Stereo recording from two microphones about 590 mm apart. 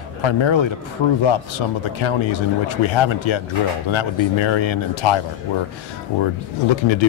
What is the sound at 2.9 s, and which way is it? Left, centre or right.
Speech, left.